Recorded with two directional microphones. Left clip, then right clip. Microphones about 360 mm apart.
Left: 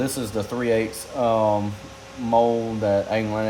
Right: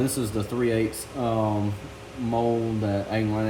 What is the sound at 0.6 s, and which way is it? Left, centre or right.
Speech, centre.